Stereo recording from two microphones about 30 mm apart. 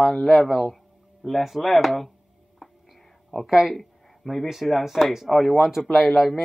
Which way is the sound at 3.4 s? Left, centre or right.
Centre.